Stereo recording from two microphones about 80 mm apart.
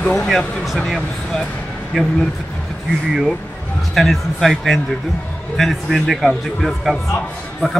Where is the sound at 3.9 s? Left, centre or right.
Centre.